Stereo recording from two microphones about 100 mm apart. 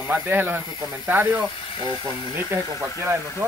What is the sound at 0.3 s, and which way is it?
Speech, 20° right (ahead or behind).